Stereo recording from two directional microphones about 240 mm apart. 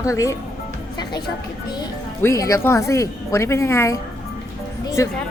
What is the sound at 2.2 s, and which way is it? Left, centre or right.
Speech, centre.